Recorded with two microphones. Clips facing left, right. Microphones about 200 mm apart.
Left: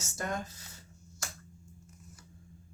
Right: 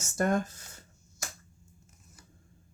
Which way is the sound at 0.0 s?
50° right (ahead or behind).